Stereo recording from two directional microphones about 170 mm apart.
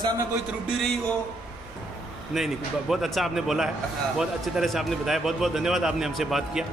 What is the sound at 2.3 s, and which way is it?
A man's voice, centre (ahead or behind).